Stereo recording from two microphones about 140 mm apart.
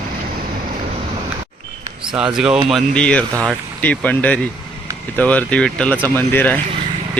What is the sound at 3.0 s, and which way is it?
Speech, 5° left (ahead or behind).